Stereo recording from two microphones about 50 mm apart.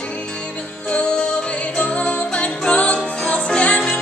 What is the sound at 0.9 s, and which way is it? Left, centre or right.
Music, left.